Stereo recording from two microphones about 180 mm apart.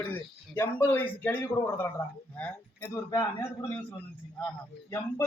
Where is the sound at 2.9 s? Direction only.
20° left (ahead or behind).